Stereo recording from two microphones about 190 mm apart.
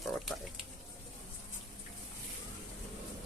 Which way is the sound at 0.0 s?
Centre (ahead or behind).